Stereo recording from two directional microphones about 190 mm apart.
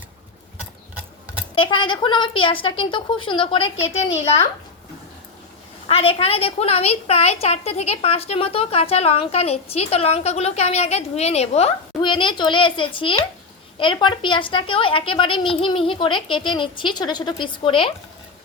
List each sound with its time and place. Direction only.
1.5 s a woman's voice: 25° left (ahead or behind)
5.9 s a woman's voice: 30° left (ahead or behind)